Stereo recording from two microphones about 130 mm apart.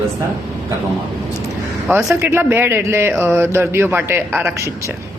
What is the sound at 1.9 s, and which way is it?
Speech, 15° right (ahead or behind).